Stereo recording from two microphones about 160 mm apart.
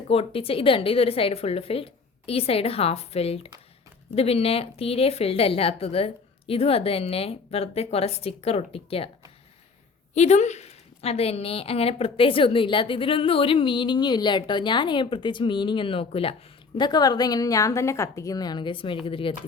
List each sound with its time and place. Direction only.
0.1 s a woman's voice: 35° left (ahead or behind)
10.2 s a woman's voice: 45° left (ahead or behind)